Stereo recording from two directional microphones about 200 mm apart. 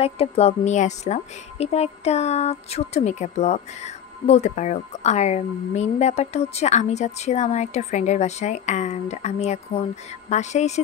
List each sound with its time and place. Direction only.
0.0 s a woman's voice: 30° left (ahead or behind)